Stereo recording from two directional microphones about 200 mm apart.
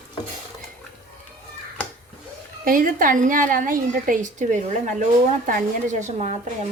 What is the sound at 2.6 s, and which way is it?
A woman's voice, 45° right (ahead or behind).